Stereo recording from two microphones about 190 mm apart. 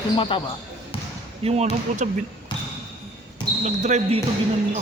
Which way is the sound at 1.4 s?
35° right (ahead or behind).